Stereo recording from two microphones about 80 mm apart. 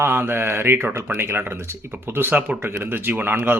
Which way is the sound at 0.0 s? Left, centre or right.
Right.